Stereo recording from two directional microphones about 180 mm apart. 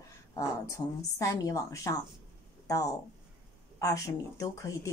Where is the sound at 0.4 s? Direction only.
15° left (ahead or behind).